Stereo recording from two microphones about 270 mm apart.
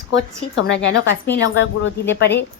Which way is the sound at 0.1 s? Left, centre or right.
Left.